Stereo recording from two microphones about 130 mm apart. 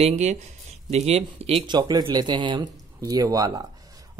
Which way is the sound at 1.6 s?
30° right (ahead or behind).